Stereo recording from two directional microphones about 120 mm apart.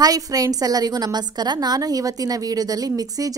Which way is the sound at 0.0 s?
30° right (ahead or behind).